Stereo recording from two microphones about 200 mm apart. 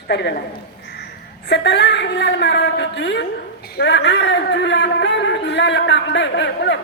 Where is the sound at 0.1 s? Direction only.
55° left (ahead or behind).